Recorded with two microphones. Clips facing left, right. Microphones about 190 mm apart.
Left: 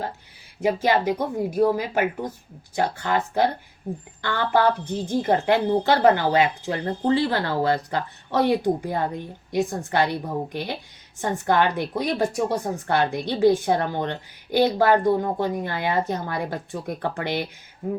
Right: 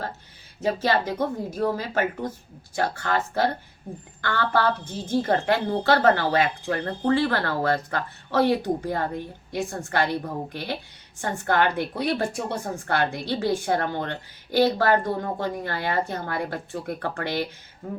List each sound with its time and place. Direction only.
0.6 s a woman's voice: 15° left (ahead or behind)